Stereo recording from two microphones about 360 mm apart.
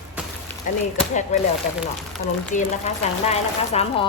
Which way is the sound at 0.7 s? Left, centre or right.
Left.